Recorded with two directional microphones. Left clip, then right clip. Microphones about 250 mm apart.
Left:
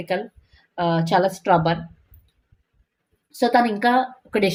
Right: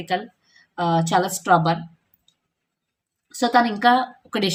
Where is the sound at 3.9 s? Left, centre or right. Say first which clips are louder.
Left 2 dB; centre.